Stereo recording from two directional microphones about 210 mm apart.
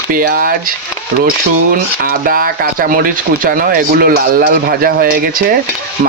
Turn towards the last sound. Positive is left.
turn(degrees=-45)  # may be behind; listen again after turning